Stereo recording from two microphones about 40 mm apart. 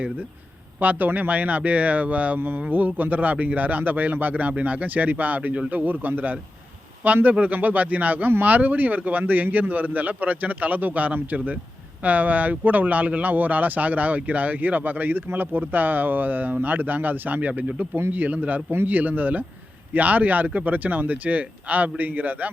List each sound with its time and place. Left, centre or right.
0.8 s speech: right
17.6 s speech: right
18.1 s speech: right